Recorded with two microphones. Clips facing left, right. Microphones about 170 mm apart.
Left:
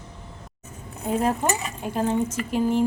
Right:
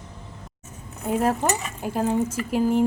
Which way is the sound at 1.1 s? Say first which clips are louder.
Right 1 dB; centre (ahead or behind).